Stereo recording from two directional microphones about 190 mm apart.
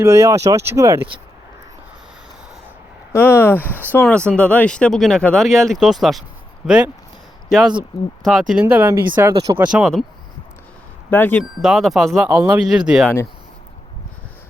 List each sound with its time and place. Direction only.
0.0 s speech: 15° right (ahead or behind)
3.1 s speech: 15° left (ahead or behind); by 6.9 s 5° right (ahead or behind)
8.2 s speech: centre (ahead or behind)
9.6 s speech: centre (ahead or behind)
11.1 s speech: 10° left (ahead or behind)
11.6 s speech: centre (ahead or behind)